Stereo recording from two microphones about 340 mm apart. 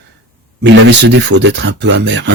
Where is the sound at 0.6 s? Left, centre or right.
Right.